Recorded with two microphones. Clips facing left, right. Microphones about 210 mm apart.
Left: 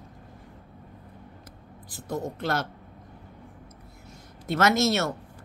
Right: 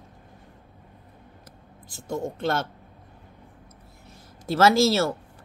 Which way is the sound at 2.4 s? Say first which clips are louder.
Right 3 dB; 25° right (ahead or behind).